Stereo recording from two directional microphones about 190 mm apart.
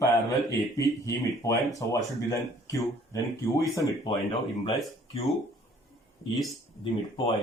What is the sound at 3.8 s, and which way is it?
Speech, 25° left (ahead or behind).